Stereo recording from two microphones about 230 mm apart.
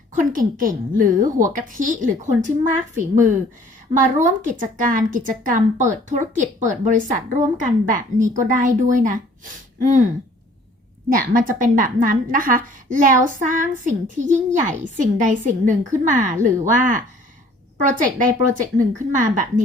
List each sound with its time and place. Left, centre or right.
0.1 s a woman's voice: right
4.4 s a woman's voice: right
11.1 s a woman's voice: right